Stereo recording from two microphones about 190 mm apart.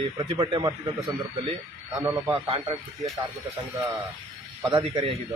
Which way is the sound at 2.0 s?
10° right (ahead or behind).